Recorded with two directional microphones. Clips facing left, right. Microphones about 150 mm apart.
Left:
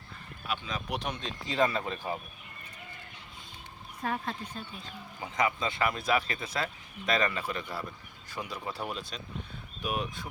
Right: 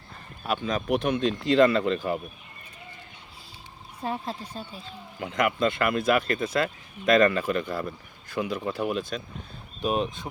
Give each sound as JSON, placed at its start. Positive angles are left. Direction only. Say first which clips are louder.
{"t": 0.4, "sound": "speech", "louder": "right 9 dB", "side_deg": -45}
{"t": 4.0, "sound": "speech", "louder": "right 2 dB", "side_deg": -30}
{"t": 5.2, "sound": "speech", "louder": "right 6 dB", "side_deg": -65}
{"t": 9.0, "sound": "speech", "louder": "right 10 dB", "side_deg": -50}
{"t": 9.8, "sound": "speech", "louder": "right 7 dB", "side_deg": -25}